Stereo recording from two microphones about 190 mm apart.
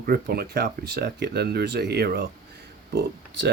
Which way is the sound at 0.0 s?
55° right (ahead or behind).